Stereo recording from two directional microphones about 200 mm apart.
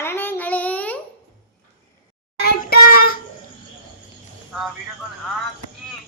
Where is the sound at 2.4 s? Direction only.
50° left (ahead or behind).